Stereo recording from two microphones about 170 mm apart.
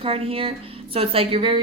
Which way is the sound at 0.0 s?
35° right (ahead or behind).